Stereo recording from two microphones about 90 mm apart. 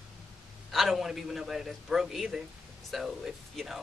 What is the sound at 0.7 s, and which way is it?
Speech, centre (ahead or behind).